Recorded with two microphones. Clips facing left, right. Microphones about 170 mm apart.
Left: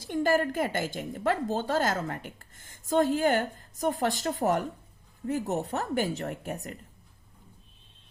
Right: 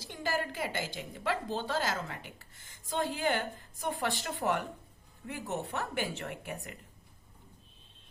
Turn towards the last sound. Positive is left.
turn(degrees=40)  # may be behind; listen again after turning